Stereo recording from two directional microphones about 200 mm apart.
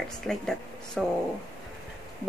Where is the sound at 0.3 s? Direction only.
5° left (ahead or behind).